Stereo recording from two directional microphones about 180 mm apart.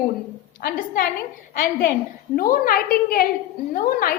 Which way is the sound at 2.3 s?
50° left (ahead or behind).